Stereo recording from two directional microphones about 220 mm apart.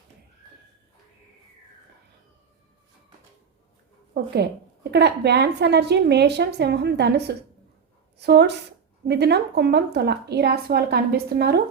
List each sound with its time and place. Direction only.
4.1 s a woman's voice: 50° right (ahead or behind)